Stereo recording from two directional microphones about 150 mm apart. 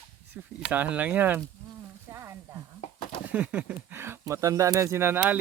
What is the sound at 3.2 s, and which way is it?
Speech, 10° right (ahead or behind).